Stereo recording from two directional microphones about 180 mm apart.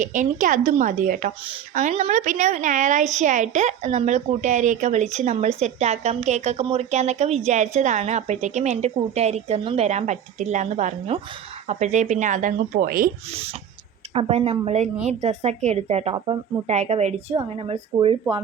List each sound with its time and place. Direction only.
0.0 s a woman's voice: 45° right (ahead or behind)
14.1 s a woman's voice: 35° right (ahead or behind)
16.1 s speech: 25° right (ahead or behind)
16.6 s a woman's voice: 40° right (ahead or behind)